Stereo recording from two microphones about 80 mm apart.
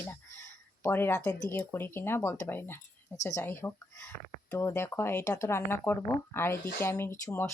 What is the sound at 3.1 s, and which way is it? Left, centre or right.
Speech, left.